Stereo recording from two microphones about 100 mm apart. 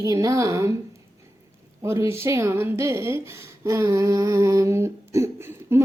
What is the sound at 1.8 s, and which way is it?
Speech, 25° right (ahead or behind).